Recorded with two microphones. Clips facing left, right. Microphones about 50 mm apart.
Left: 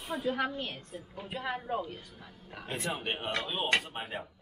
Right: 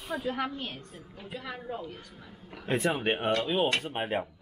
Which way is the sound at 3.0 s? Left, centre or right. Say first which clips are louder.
Right 7 dB; right.